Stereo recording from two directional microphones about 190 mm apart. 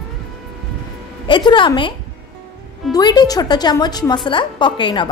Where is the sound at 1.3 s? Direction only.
25° left (ahead or behind).